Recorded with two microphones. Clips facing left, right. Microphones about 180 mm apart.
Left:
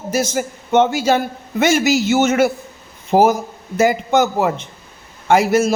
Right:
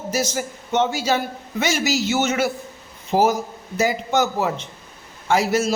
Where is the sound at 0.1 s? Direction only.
55° left (ahead or behind).